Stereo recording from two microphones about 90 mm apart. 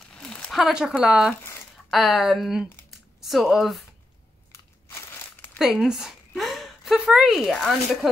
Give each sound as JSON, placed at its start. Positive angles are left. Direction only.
{"t": 0.1, "sound": "a sound", "side_deg": 10}
{"t": 0.6, "sound": "speech", "side_deg": -5}
{"t": 5.1, "sound": "crumpling", "side_deg": 25}
{"t": 5.6, "sound": "a woman's voice", "side_deg": -5}